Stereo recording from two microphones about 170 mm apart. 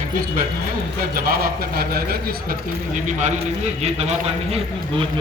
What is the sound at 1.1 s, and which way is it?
A man's voice, 60° right (ahead or behind).